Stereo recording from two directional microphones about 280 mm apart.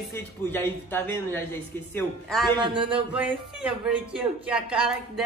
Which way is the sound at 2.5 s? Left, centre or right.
Centre.